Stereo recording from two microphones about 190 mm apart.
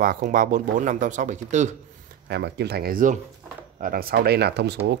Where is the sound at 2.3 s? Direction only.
60° right (ahead or behind).